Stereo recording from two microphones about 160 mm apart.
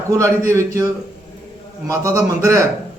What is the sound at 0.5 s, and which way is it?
Speech, 20° right (ahead or behind).